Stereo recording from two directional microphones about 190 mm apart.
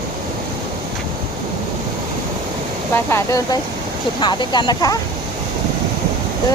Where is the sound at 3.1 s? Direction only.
15° left (ahead or behind).